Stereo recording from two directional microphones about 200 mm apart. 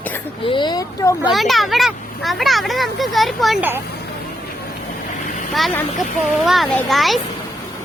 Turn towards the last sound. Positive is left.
turn(degrees=0)  # may be behind; listen again after turning